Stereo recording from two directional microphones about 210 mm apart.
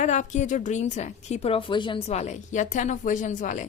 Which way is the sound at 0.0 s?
35° left (ahead or behind).